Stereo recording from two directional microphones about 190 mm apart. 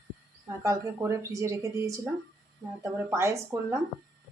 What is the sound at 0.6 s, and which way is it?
Speech, 15° right (ahead or behind).